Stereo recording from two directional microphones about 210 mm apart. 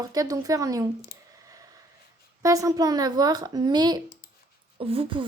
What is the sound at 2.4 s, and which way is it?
Speech, 15° right (ahead or behind).